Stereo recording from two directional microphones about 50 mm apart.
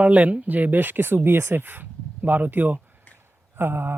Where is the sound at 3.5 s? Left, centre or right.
Right.